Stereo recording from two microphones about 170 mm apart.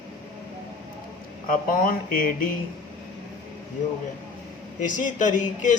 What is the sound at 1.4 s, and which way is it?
Speech, 55° left (ahead or behind).